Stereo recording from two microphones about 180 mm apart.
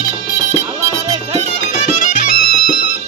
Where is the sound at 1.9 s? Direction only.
45° left (ahead or behind).